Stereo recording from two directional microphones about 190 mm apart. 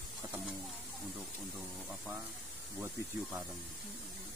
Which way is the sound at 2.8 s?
10° right (ahead or behind).